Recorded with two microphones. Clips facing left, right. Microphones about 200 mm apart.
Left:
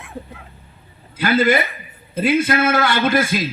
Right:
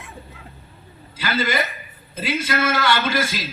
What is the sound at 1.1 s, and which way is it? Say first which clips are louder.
A man's voice: left 7 dB; 55° left (ahead or behind).